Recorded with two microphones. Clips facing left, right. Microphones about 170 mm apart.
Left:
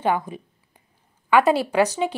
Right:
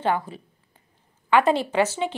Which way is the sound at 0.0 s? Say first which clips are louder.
Left 2 dB; 15° left (ahead or behind).